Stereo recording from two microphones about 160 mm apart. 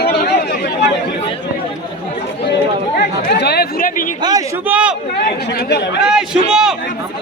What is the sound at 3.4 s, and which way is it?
Speech, 85° left.